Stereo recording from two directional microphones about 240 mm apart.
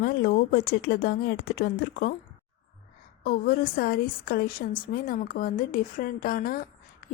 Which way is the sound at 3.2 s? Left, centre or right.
Left.